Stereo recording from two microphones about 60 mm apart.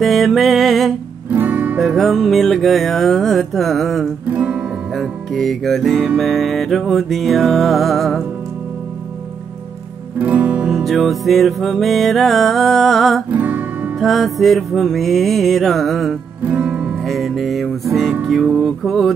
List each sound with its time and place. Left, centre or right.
0.0 s music: centre
1.3 s music: right
1.8 s music: centre
4.3 s music: right
4.9 s music: centre
10.1 s music: right
10.7 s music: centre
13.3 s music: right
13.9 s music: centre
16.4 s music: right
17.0 s music: centre